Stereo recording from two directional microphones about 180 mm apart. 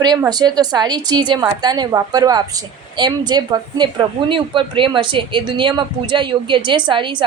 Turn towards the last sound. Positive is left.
turn(degrees=-25)  # may be behind; listen again after turning